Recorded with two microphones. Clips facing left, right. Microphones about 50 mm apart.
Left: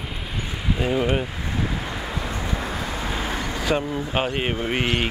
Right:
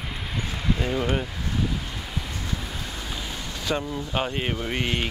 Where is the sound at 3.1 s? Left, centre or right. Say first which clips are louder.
Left 7 dB; left.